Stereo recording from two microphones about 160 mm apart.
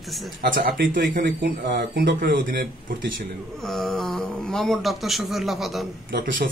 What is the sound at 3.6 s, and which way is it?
A man's voice, centre (ahead or behind).